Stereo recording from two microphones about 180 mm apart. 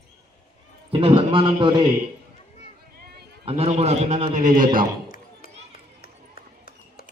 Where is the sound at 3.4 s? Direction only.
35° right (ahead or behind).